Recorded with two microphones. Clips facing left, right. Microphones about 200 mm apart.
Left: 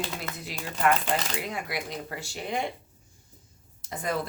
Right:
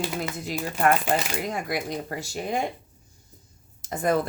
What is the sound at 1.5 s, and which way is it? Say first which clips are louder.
Speech: right 5 dB; 45° right (ahead or behind).